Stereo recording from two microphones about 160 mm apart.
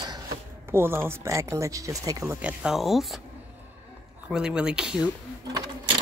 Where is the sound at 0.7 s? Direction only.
15° right (ahead or behind).